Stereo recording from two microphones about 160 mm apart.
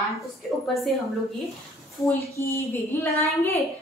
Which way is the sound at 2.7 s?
20° left (ahead or behind).